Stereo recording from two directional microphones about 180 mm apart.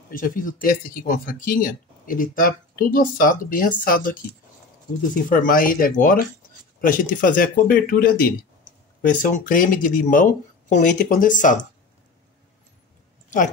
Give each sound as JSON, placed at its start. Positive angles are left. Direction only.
{"t": 0.1, "sound": "speech", "side_deg": 50}